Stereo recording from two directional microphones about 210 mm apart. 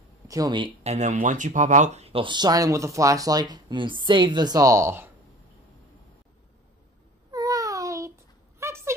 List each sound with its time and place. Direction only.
0.3 s speech: 20° right (ahead or behind)
0.8 s speech: 35° right (ahead or behind); by 5.1 s 10° right (ahead or behind)
7.2 s a sound: 15° right (ahead or behind)